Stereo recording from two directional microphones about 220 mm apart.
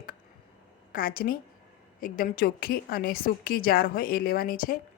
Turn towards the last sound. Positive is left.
turn(degrees=40)  # may be behind; listen again after turning